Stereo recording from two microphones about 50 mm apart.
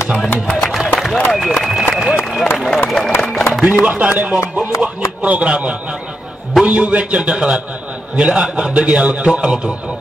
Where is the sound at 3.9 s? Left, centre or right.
Right.